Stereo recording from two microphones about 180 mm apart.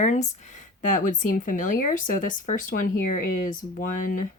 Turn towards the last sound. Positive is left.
turn(degrees=50)  # may be behind; listen again after turning